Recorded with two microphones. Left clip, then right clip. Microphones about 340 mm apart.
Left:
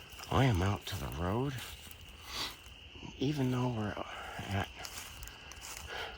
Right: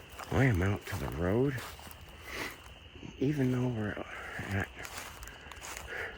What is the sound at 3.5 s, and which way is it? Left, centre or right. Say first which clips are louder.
Speech: right 1 dB; centre.